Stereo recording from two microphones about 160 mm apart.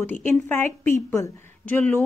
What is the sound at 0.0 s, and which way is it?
A woman's voice, 10° left (ahead or behind).